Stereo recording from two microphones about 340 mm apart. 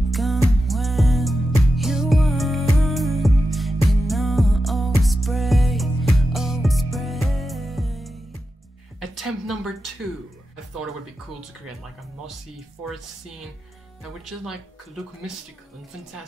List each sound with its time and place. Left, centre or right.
0.1 s music: centre
9.0 s a sound: centre
14.2 s speech: centre